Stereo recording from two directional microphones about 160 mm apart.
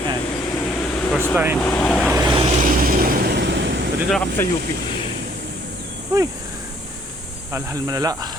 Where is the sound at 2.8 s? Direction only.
60° right (ahead or behind); by 3.8 s 90° right.